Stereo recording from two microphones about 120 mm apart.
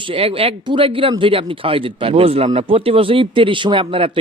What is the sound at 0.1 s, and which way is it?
Speech, 50° right (ahead or behind).